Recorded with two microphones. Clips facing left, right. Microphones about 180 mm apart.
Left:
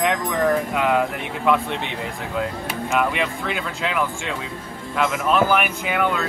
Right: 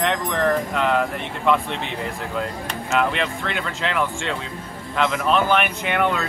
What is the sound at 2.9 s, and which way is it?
Speech, 5° left (ahead or behind).